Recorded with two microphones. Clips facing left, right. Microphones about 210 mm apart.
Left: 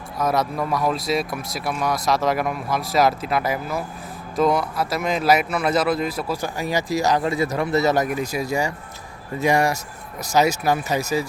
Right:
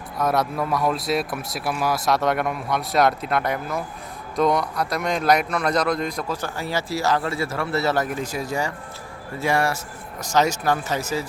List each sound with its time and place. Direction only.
0.2 s a man's voice: centre (ahead or behind)